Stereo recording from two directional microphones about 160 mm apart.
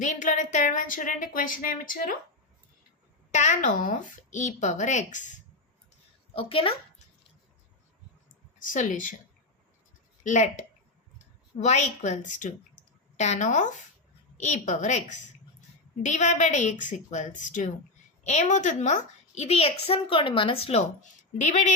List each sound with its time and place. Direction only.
0.0 s a woman's voice: 50° left (ahead or behind)
3.3 s a woman's voice: 50° left (ahead or behind)
6.3 s a woman's voice: 35° left (ahead or behind)
8.5 s a woman's voice: 55° left (ahead or behind)
10.2 s a woman's voice: 45° left (ahead or behind)
11.5 s a woman's voice: 45° left (ahead or behind)